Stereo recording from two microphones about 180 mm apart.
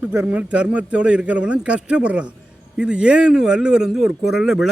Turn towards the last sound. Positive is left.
turn(degrees=-5)  # may be behind; listen again after turning